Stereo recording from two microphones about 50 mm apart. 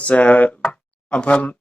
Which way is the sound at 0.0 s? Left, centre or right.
Left.